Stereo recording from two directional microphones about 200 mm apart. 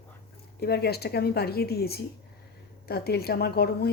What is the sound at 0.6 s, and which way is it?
Speech, 50° left (ahead or behind).